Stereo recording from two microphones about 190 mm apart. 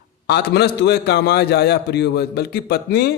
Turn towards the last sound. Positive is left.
turn(degrees=60)  # may be behind; listen again after turning